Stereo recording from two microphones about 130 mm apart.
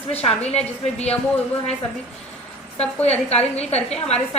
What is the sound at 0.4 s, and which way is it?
Speech, 55° left (ahead or behind).